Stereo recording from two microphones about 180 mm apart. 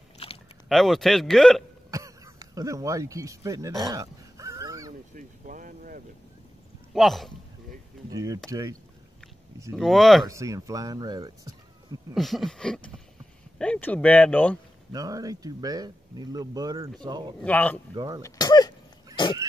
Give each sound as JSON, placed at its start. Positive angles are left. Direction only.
{"t": 0.2, "sound": "biting", "side_deg": 30}
{"t": 0.7, "sound": "speech", "side_deg": 0}
{"t": 1.9, "sound": "speech", "side_deg": -20}
{"t": 3.8, "sound": "dog", "side_deg": -20}
{"t": 5.1, "sound": "boat", "side_deg": -50}
{"t": 6.9, "sound": "speech", "side_deg": 0}
{"t": 8.1, "sound": "speech", "side_deg": -20}
{"t": 9.8, "sound": "speech", "side_deg": 0}
{"t": 10.2, "sound": "speech", "side_deg": -15}
{"t": 12.1, "sound": "speech", "side_deg": 0}
{"t": 14.9, "sound": "speech", "side_deg": -20}
{"t": 17.4, "sound": "speech", "side_deg": 10}
{"t": 17.9, "sound": "speech", "side_deg": -25}
{"t": 18.2, "sound": "speech", "side_deg": 20}